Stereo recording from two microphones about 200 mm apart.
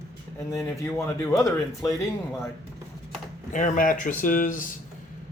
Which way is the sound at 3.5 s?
40° left (ahead or behind).